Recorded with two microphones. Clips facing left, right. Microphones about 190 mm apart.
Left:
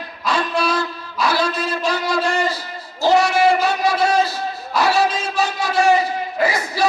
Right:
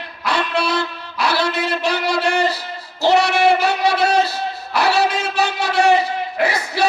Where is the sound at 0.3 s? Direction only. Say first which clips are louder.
Even; 65° right (ahead or behind).